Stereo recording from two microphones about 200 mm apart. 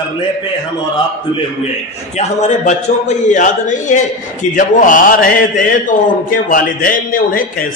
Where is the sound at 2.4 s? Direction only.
35° left (ahead or behind).